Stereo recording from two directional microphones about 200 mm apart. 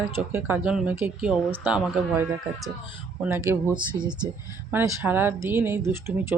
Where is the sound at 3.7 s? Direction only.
25° right (ahead or behind).